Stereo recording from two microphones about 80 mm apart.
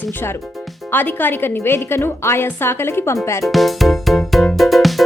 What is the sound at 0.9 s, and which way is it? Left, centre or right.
A woman's voice, left.